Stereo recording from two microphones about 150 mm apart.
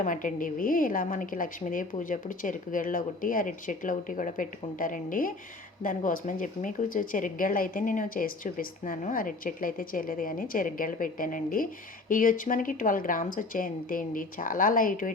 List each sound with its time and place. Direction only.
0.0 s speech: 60° left (ahead or behind)